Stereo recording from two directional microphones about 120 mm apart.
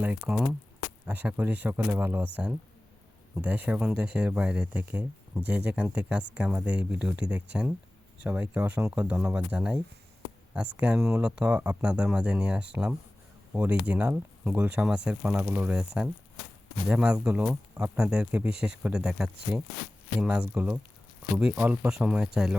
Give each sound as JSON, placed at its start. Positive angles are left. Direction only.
{"t": 0.0, "sound": "speech", "side_deg": -10}